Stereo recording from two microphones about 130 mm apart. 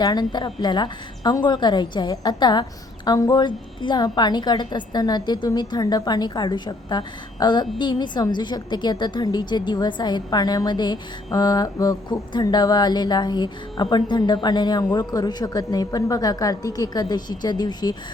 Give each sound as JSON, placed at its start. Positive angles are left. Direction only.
{"t": 0.0, "sound": "a woman's voice", "side_deg": 30}